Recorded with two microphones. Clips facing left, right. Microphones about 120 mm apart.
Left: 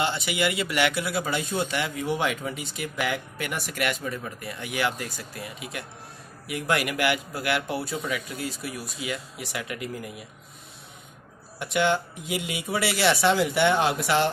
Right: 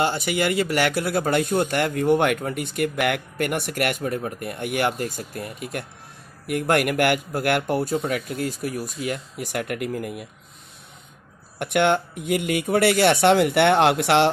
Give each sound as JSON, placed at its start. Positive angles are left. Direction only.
{"t": 0.0, "sound": "a man's voice", "side_deg": -45}
{"t": 11.5, "sound": "speech", "side_deg": -60}